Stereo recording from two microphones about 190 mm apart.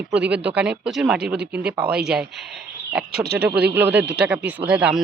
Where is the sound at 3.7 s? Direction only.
10° right (ahead or behind).